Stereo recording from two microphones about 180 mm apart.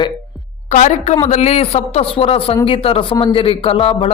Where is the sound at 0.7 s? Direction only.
40° left (ahead or behind).